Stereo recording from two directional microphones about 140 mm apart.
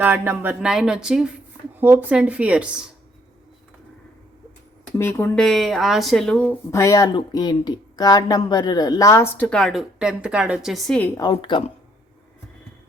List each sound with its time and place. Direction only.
0.0 s a woman's voice: 15° right (ahead or behind)
4.9 s speech: 15° left (ahead or behind)
5.3 s a woman's voice: 5° left (ahead or behind)
6.7 s speech: 20° left (ahead or behind)
9.5 s a woman's voice: 5° left (ahead or behind)
11.2 s a woman's voice: 35° left (ahead or behind)